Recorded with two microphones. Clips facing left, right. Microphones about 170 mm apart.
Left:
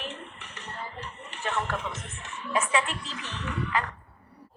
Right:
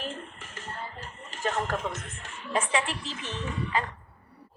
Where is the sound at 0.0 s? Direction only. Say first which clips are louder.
Right 2 dB; 45° right (ahead or behind).